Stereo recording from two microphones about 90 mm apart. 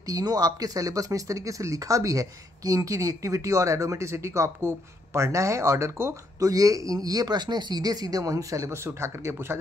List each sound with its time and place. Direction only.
0.0 s speech: 45° right (ahead or behind); by 9.6 s 30° right (ahead or behind)